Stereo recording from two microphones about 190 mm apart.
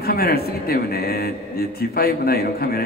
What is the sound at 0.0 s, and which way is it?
A man's voice, 55° left (ahead or behind).